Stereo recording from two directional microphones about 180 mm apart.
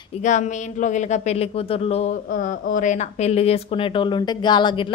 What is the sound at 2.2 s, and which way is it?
A woman's voice, 50° left (ahead or behind).